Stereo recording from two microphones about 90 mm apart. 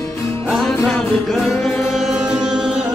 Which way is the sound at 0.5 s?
Centre (ahead or behind).